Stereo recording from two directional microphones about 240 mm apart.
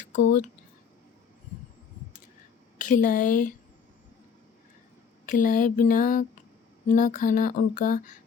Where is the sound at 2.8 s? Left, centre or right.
Left.